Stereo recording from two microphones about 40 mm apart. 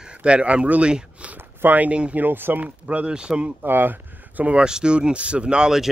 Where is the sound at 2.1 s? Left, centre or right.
Right.